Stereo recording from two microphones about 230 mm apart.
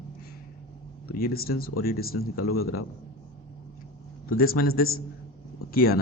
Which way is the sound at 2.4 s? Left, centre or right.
Left.